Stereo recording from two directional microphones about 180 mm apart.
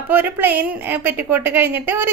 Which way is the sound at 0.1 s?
10° right (ahead or behind).